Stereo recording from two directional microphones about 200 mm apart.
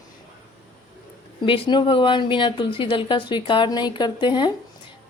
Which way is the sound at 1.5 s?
25° left (ahead or behind).